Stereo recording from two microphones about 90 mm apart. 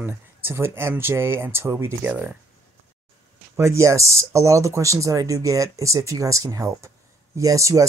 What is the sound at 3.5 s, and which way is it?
Speech, 35° right (ahead or behind).